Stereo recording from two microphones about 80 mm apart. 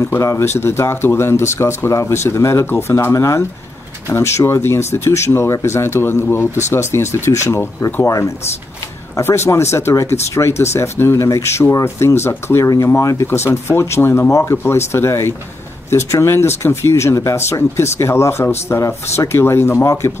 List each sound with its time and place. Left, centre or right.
0.0 s speech: left